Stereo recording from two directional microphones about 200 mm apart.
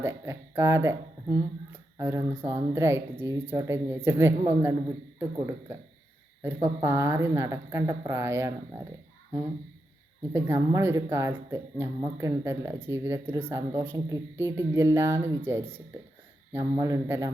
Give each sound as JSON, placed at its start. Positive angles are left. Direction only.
{"t": 0.0, "sound": "speech", "side_deg": -15}
{"t": 6.4, "sound": "speech", "side_deg": -15}
{"t": 10.3, "sound": "speech", "side_deg": -15}
{"t": 16.5, "sound": "speech", "side_deg": -15}